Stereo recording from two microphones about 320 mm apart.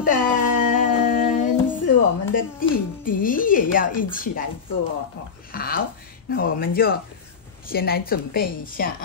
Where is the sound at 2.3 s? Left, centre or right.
Left.